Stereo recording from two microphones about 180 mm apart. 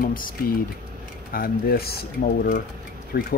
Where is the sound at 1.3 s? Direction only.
55° left (ahead or behind).